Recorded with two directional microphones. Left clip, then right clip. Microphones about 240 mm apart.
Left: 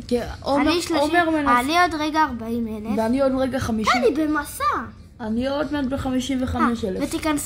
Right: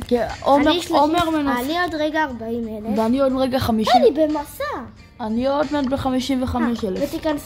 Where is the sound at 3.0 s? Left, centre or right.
Right.